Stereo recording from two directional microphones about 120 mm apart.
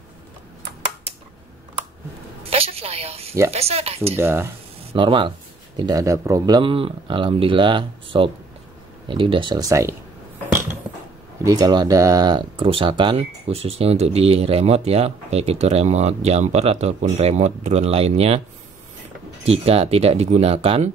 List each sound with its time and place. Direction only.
2.5 s speech: 55° right (ahead or behind)
4.2 s speech: 20° right (ahead or behind)
4.9 s speech: 45° right (ahead or behind)
5.8 s speech: 30° right (ahead or behind)
9.7 s speech: 25° right (ahead or behind)
10.9 s mechanisms: 5° right (ahead or behind)
11.4 s speech: 30° right (ahead or behind)
13.2 s speech: 55° right (ahead or behind)
19.4 s speech: 55° right (ahead or behind)